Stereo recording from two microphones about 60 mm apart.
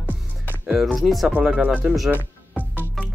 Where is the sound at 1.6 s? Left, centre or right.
Centre.